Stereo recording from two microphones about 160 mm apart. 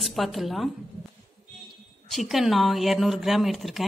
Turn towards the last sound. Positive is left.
turn(degrees=0)  # may be behind; listen again after turning